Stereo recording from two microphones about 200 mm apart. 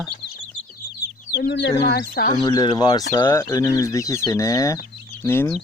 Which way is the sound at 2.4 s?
20° left (ahead or behind).